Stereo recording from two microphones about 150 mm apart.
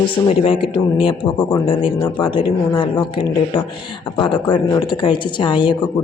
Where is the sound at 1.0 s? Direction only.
35° left (ahead or behind).